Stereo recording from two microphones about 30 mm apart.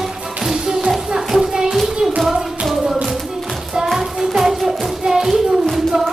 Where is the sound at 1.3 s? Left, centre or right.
Centre.